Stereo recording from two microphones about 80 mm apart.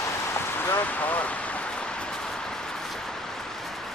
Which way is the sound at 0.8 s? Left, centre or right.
Left.